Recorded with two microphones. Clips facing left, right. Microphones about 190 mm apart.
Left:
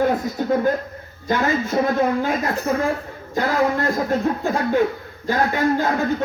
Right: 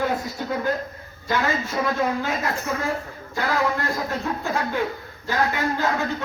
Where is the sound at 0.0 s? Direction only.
50° left (ahead or behind).